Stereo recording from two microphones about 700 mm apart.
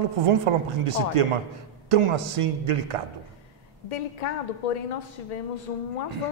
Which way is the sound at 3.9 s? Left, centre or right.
Left.